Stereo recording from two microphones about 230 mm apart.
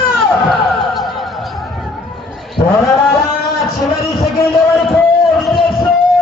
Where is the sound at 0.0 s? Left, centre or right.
Centre.